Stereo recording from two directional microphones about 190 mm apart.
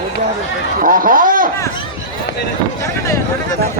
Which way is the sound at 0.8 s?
45° right (ahead or behind).